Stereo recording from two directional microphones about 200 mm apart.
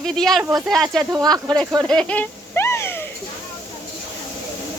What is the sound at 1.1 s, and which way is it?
Speech, 20° right (ahead or behind).